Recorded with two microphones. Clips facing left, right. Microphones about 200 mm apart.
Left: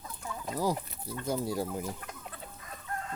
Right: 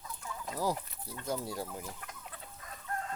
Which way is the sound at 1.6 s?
20° left (ahead or behind).